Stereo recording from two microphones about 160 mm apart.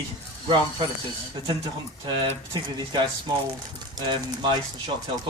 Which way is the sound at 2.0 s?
35° right (ahead or behind).